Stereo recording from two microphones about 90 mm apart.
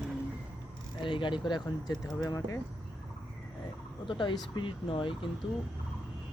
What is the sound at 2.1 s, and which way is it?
Speech, 40° left (ahead or behind).